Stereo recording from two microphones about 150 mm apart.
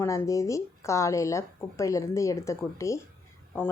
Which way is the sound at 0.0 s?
20° left (ahead or behind).